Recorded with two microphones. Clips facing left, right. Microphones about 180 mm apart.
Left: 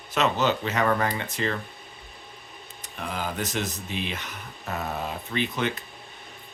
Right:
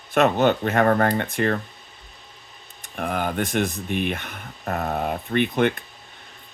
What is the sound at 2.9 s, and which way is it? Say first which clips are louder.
Speech: right 6 dB; 55° right (ahead or behind).